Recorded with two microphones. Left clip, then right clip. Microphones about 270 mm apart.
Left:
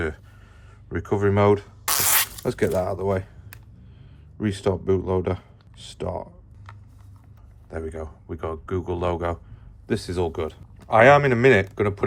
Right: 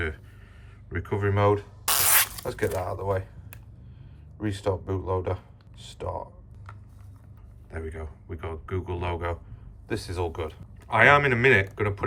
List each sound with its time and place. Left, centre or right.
0.9 s a man's voice: centre
1.9 s spray: centre
2.5 s a man's voice: left
4.4 s a man's voice: left
7.7 s a man's voice: centre